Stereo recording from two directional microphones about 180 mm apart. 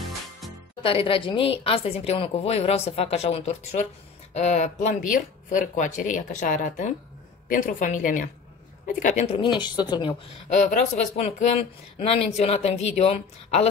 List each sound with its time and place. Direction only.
0.8 s a woman's voice: 30° left (ahead or behind)
10.5 s speech: 40° left (ahead or behind)